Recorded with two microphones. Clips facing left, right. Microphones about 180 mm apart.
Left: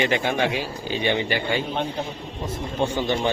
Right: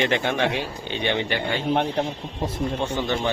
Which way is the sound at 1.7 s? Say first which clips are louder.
Right 5 dB; 70° right (ahead or behind).